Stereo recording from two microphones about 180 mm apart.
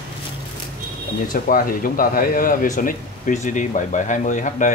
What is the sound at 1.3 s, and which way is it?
Speech, 50° left (ahead or behind).